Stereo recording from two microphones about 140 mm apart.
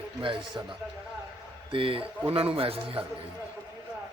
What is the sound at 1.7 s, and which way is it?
Speech, 40° right (ahead or behind).